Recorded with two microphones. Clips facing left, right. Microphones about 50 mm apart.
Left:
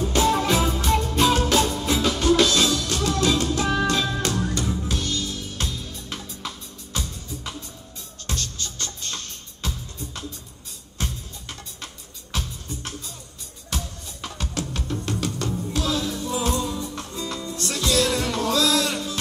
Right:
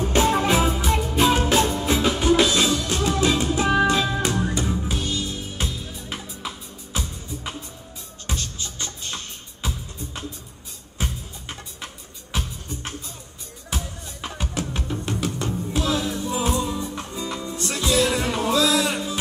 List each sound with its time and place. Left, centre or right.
0.0 s music: right
0.7 s music: centre
8.3 s music: centre
14.9 s music: centre